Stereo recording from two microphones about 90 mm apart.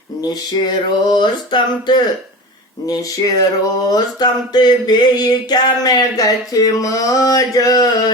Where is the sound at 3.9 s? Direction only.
45° left (ahead or behind).